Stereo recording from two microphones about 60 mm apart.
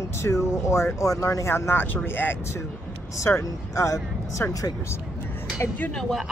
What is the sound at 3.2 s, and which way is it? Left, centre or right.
Speech, left.